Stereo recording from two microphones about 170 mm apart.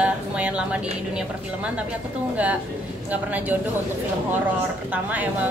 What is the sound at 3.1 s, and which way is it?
Speech, 10° right (ahead or behind).